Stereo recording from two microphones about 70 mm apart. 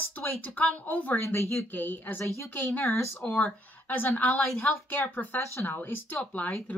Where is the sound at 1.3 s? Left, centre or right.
Left.